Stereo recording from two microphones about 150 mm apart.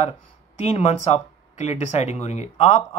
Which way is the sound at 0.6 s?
50° left (ahead or behind).